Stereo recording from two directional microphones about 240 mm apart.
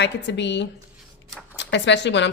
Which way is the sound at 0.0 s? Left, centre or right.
Left.